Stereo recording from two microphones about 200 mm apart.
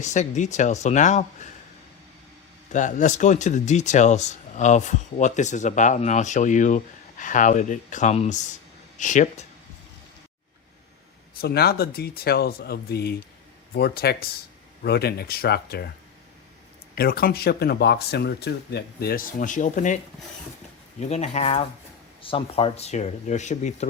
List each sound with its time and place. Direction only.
0.0 s speech: 35° left (ahead or behind)
2.7 s speech: 40° left (ahead or behind)
11.3 s speech: 50° left (ahead or behind)
16.9 s speech: 50° left (ahead or behind)
21.0 s speech: 35° left (ahead or behind)